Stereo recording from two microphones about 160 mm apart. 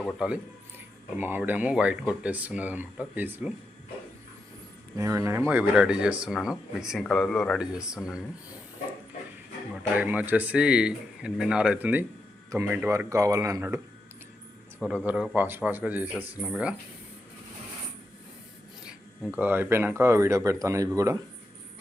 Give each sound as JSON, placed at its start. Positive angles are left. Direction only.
{"t": 0.0, "sound": "speech", "side_deg": 5}
{"t": 1.2, "sound": "speech", "side_deg": -10}
{"t": 4.9, "sound": "speech", "side_deg": -20}
{"t": 9.9, "sound": "speech", "side_deg": -10}
{"t": 18.9, "sound": "speech", "side_deg": -5}